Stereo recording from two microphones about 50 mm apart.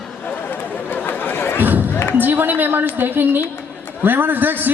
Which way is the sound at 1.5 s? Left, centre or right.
Right.